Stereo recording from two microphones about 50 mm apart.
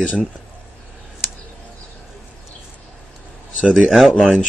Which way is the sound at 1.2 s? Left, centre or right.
Centre.